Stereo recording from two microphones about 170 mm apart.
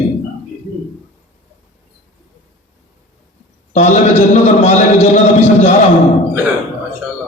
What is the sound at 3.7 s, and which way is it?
A man's voice, 45° left (ahead or behind).